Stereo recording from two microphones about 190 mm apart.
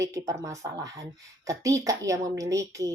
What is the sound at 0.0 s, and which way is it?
A woman's voice, 20° right (ahead or behind).